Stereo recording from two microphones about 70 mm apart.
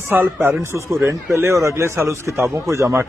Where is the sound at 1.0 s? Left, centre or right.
Right.